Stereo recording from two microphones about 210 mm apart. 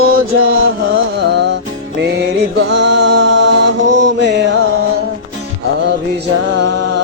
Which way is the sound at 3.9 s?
60° right (ahead or behind).